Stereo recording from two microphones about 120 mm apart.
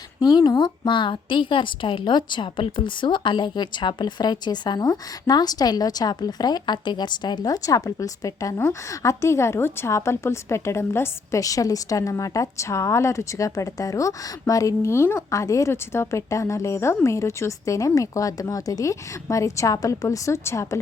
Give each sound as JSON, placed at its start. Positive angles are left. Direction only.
{"t": 0.2, "sound": "a woman's voice", "side_deg": 35}